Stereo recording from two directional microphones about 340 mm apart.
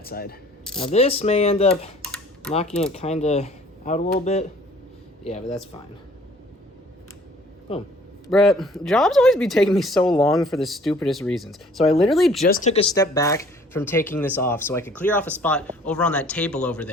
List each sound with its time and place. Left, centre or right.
0.0 s speech: left
7.7 s speech: centre
8.3 s speech: centre
12.5 s speech: centre